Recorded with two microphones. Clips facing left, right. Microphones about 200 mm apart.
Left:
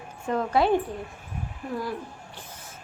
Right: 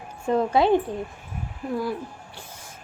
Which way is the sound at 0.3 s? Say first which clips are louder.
Right 3 dB; 25° right (ahead or behind).